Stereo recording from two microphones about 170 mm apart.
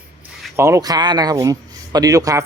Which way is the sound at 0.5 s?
15° right (ahead or behind).